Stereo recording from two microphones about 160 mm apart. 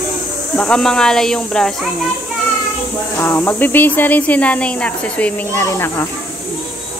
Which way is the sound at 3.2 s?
15° left (ahead or behind).